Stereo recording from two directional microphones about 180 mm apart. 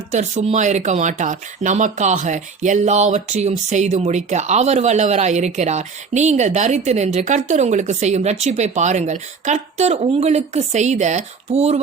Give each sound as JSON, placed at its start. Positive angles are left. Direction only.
{"t": 0.1, "sound": "speech", "side_deg": -40}